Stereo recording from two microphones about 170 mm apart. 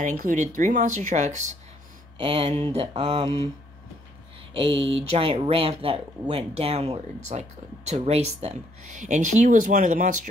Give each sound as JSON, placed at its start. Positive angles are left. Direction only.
{"t": 0.0, "sound": "speech", "side_deg": -50}
{"t": 2.1, "sound": "speech", "side_deg": -35}
{"t": 4.6, "sound": "speech", "side_deg": -30}